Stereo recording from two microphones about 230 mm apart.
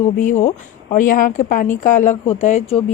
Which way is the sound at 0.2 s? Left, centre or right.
Left.